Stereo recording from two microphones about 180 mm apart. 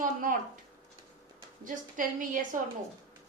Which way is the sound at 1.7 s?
50° right (ahead or behind).